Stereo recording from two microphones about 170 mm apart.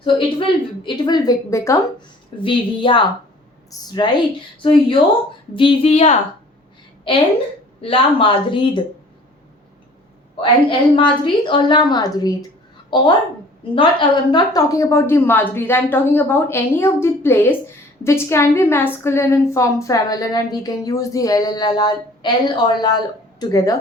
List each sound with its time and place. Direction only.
0.0 s a woman's voice: 30° left (ahead or behind)
2.4 s a woman's voice: 30° left (ahead or behind)
5.5 s a woman's voice: 30° left (ahead or behind)
7.8 s a woman's voice: 30° left (ahead or behind)
10.4 s a woman's voice: 30° left (ahead or behind)